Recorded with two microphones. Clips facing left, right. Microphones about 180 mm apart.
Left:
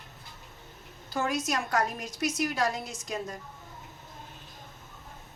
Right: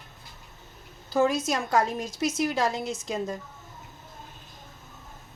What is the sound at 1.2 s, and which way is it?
A woman's voice, 25° right (ahead or behind).